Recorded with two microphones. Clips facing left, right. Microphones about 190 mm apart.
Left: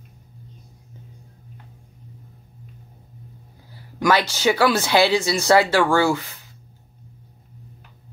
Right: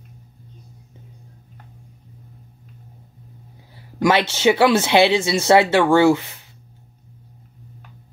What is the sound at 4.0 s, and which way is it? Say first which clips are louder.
Speech: right 2 dB; 25° right (ahead or behind).